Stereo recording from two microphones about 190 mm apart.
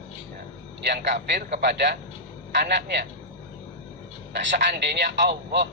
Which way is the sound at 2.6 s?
65° right (ahead or behind).